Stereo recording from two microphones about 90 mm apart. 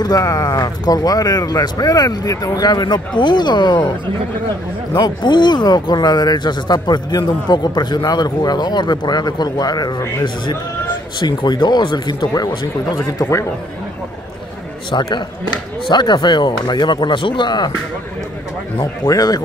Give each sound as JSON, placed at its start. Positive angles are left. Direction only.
{"t": 0.0, "sound": "speech", "side_deg": 40}
{"t": 4.9, "sound": "speech", "side_deg": 55}
{"t": 14.9, "sound": "speech", "side_deg": 55}
{"t": 18.8, "sound": "speech", "side_deg": 40}